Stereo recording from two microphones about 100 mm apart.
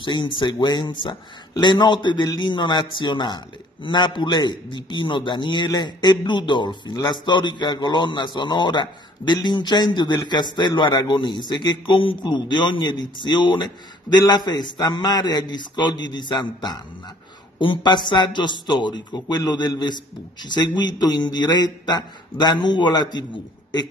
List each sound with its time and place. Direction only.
0.0 s a man's voice: 50° left (ahead or behind)